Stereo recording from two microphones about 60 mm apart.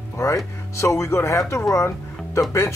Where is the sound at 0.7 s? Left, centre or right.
Left.